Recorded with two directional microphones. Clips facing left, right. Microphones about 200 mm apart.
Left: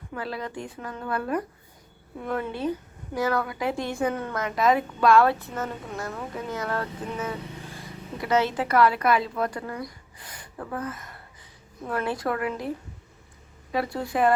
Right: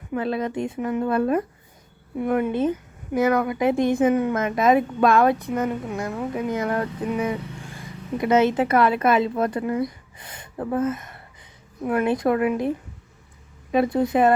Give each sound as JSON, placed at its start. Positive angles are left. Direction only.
{"t": 0.1, "sound": "a woman's voice", "side_deg": -20}